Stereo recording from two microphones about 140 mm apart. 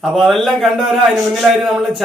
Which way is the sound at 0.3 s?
Centre (ahead or behind).